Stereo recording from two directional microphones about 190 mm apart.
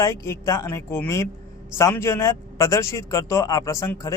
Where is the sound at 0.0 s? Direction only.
15° left (ahead or behind).